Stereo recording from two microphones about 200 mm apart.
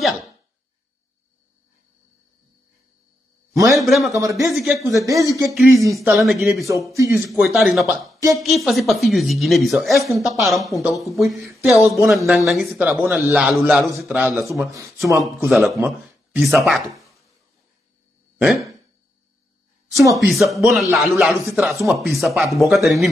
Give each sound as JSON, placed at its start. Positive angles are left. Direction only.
{"t": 0.0, "sound": "a sound", "side_deg": 0}
{"t": 3.6, "sound": "speech", "side_deg": 0}
{"t": 4.2, "sound": "a man's voice", "side_deg": -15}
{"t": 4.5, "sound": "speech", "side_deg": 0}
{"t": 4.9, "sound": "a man's voice", "side_deg": -15}
{"t": 5.5, "sound": "speech", "side_deg": 0}
{"t": 14.7, "sound": "speech", "side_deg": -15}
{"t": 15.4, "sound": "speech", "side_deg": 0}
{"t": 16.9, "sound": "a sound", "side_deg": 0}
{"t": 20.2, "sound": "speech", "side_deg": 0}